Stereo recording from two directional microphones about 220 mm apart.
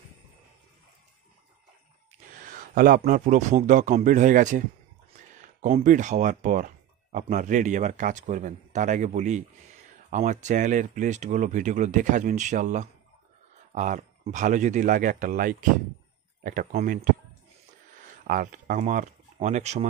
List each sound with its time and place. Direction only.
2.3 s speech: 40° right (ahead or behind)
18.0 s speech: 40° right (ahead or behind)